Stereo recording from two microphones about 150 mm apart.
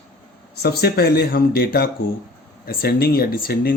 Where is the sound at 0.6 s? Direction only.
90° left.